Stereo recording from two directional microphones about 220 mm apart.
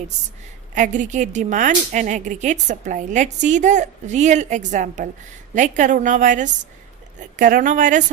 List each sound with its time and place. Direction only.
0.7 s a woman's voice: 35° right (ahead or behind)